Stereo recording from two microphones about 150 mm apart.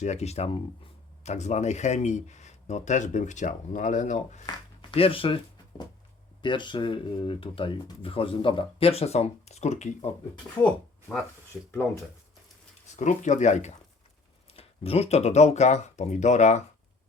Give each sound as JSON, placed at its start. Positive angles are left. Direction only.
{"t": 0.0, "sound": "speech", "side_deg": 45}
{"t": 4.4, "sound": "speech", "side_deg": 35}
{"t": 13.0, "sound": "speech", "side_deg": 55}